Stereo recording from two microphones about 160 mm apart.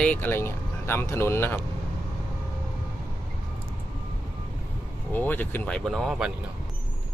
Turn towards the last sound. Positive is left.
turn(degrees=0)  # may be behind; listen again after turning